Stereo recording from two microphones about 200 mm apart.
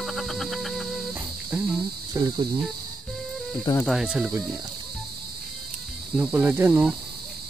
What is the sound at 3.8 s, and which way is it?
Speech, centre (ahead or behind).